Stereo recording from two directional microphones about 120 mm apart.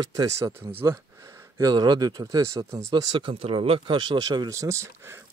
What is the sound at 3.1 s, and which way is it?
Speech, 45° right (ahead or behind).